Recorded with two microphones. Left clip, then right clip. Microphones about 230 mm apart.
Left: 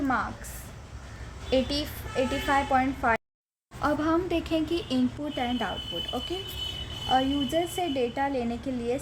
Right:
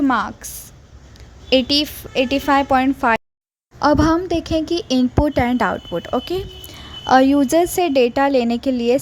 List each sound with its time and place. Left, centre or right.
0.0 s speech: right
1.5 s a woman's voice: right